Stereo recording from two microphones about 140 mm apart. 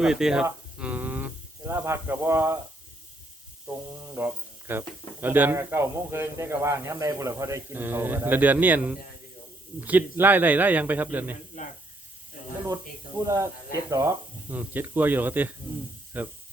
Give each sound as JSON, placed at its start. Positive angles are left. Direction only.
{"t": 0.0, "sound": "speech", "side_deg": -5}
{"t": 0.8, "sound": "a sound", "side_deg": -10}
{"t": 3.7, "sound": "speech", "side_deg": -15}
{"t": 13.2, "sound": "speech", "side_deg": -20}
{"t": 14.5, "sound": "speech", "side_deg": -10}